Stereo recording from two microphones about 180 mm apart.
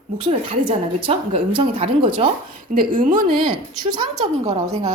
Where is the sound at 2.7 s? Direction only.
45° right (ahead or behind).